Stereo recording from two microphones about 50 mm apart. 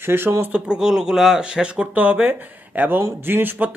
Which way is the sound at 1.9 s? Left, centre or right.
Right.